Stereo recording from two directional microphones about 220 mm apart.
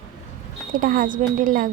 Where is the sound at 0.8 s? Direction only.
40° right (ahead or behind).